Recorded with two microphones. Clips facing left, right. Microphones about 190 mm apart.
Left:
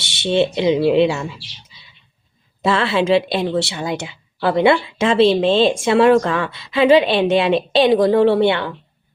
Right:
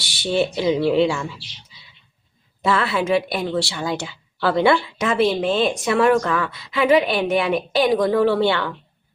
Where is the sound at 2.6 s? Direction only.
25° left (ahead or behind).